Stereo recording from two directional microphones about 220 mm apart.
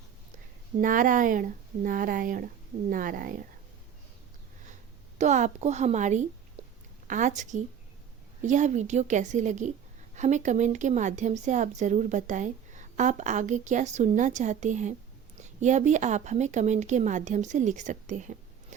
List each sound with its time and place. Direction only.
0.8 s a woman's voice: 35° right (ahead or behind)
5.1 s a woman's voice: 30° right (ahead or behind)
6.6 s a sound: 25° right (ahead or behind)
7.1 s a woman's voice: 35° right (ahead or behind)